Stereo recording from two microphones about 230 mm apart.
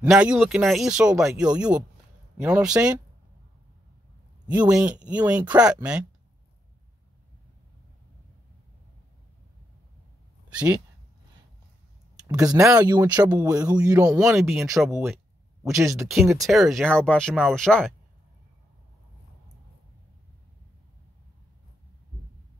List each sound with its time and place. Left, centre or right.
0.0 s speech: centre
4.5 s speech: centre
12.3 s speech: centre
14.2 s speech: centre